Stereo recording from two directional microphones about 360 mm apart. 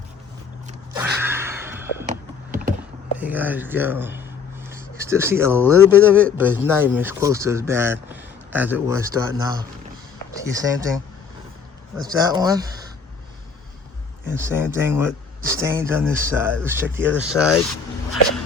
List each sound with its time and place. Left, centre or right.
0.9 s gasp: centre
2.0 s a sound: right
3.2 s speech: centre
12.0 s speech: centre
14.3 s speech: centre